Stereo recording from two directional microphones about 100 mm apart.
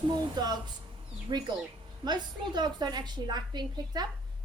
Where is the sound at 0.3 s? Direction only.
40° right (ahead or behind).